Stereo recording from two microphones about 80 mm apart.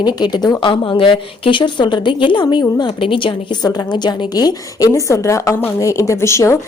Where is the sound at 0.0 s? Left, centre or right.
Left.